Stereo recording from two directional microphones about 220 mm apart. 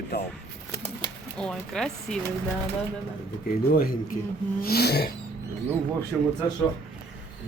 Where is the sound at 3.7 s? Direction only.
40° left (ahead or behind).